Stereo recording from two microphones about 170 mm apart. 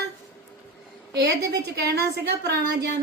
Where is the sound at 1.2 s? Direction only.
75° right (ahead or behind).